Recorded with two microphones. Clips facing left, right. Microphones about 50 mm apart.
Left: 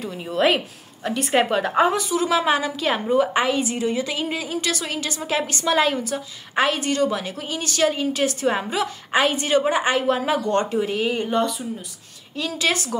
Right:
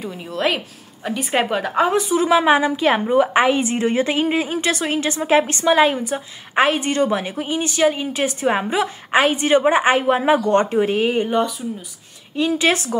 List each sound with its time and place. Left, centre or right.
0.0 s a woman's voice: centre
2.0 s a woman's voice: right